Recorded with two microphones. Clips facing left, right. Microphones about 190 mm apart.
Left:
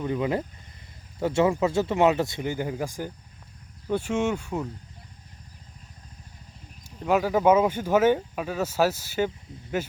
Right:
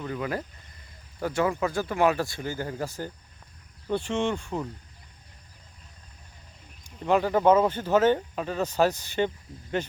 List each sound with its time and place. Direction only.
0.0 s speech: 20° left (ahead or behind)
7.0 s speech: 5° left (ahead or behind)